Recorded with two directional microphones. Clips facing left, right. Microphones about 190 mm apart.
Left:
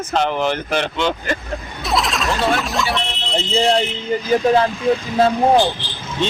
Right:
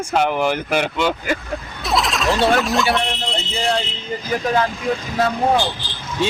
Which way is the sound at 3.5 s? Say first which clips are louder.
Left 6 dB; 25° left (ahead or behind).